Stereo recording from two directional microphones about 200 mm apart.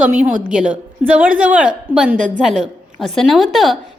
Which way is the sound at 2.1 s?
40° right (ahead or behind).